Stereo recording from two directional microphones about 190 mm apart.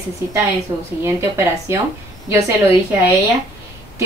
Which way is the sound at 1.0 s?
15° right (ahead or behind).